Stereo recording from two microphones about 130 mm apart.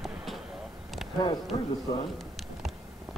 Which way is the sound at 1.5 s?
55° left (ahead or behind).